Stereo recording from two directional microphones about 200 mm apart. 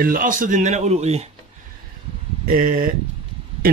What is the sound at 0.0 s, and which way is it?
Speech, 45° right (ahead or behind).